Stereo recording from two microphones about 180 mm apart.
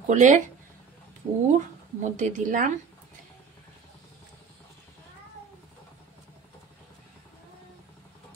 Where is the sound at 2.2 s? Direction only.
45° right (ahead or behind).